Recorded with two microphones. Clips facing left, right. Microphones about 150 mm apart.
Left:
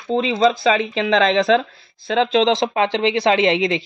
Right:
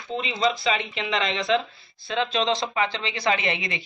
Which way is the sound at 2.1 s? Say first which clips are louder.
Left 8 dB; 90° left.